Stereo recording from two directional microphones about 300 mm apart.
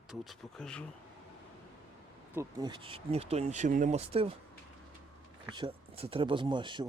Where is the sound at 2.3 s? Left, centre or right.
Centre.